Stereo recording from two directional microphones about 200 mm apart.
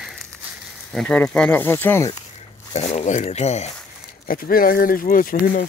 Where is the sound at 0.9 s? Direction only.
5° left (ahead or behind).